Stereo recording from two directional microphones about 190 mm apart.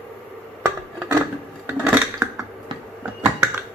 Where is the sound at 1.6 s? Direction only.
10° right (ahead or behind).